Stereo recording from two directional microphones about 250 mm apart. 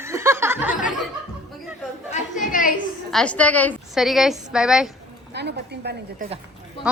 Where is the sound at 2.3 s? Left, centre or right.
Left.